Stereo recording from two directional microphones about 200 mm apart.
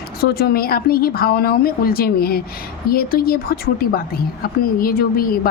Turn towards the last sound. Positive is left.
turn(degrees=45)  # may be behind; listen again after turning